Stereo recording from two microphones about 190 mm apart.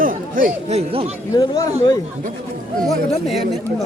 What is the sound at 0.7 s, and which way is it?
Speech, 30° right (ahead or behind).